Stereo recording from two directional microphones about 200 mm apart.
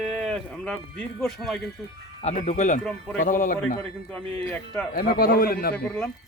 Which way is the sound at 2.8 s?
5° left (ahead or behind).